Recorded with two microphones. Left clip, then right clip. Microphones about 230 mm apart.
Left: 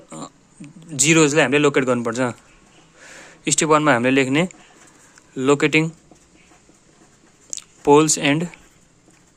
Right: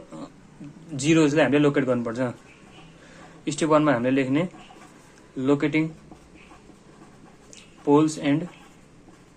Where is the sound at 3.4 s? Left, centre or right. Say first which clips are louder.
Left 4 dB; left.